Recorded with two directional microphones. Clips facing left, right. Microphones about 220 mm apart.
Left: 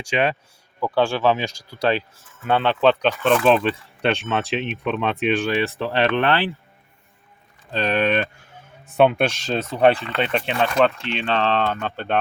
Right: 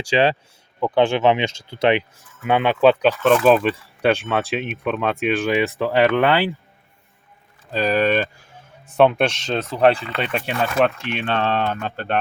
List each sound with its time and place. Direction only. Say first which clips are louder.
0.0 s speech: right 4 dB; 30° right (ahead or behind)
0.8 s speech: right 3 dB; 20° right (ahead or behind)
7.7 s speech: right 2 dB; centre (ahead or behind)